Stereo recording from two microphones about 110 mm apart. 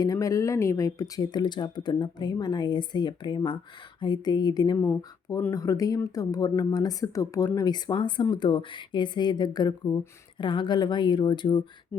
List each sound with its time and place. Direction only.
0.0 s speech: 30° left (ahead or behind)